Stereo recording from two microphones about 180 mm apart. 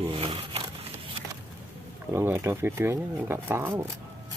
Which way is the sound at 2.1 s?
15° right (ahead or behind).